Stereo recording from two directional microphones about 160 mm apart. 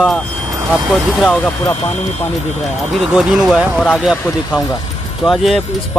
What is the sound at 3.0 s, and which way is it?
Speech, 5° right (ahead or behind).